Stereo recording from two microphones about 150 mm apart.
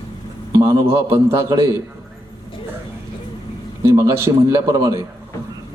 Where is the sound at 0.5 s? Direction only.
20° right (ahead or behind).